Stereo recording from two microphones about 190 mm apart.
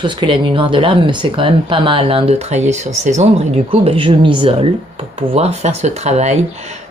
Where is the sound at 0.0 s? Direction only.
25° right (ahead or behind).